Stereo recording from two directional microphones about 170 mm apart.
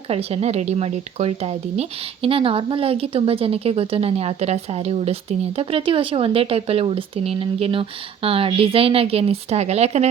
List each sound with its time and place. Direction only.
0.1 s speech: 35° right (ahead or behind)